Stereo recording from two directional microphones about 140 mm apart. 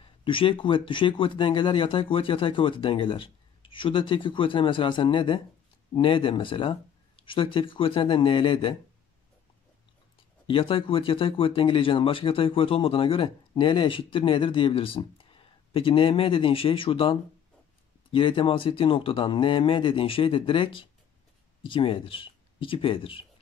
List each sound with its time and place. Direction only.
0.0 s speech: 40° left (ahead or behind)
10.4 s speech: 40° left (ahead or behind)